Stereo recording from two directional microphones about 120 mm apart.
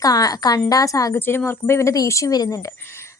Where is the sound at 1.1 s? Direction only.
20° left (ahead or behind).